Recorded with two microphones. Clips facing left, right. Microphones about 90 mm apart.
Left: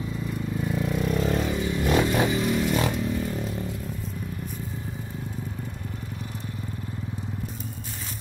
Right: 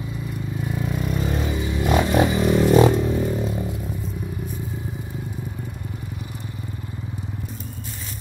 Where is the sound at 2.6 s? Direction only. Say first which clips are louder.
Right 10 dB; 35° right (ahead or behind).